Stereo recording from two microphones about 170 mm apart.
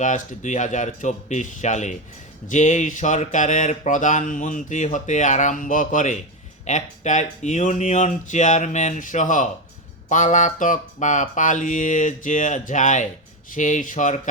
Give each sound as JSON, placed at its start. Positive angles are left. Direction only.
{"t": 0.0, "sound": "speech", "side_deg": 45}